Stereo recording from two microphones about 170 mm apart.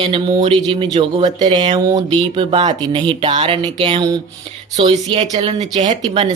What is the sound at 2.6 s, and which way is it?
Speech, 45° right (ahead or behind).